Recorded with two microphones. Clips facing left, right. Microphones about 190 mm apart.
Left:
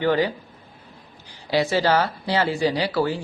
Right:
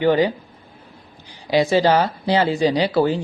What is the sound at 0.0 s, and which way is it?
Speech, 20° right (ahead or behind).